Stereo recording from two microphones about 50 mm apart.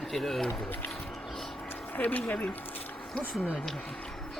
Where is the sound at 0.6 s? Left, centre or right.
Left.